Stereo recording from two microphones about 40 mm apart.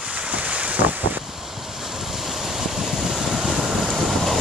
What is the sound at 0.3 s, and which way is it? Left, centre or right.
Boat, right.